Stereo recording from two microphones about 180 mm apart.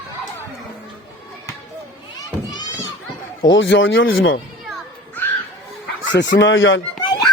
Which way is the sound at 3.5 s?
90° left.